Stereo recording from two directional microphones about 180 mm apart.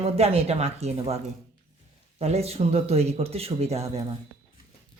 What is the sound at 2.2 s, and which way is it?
Speech, 35° right (ahead or behind).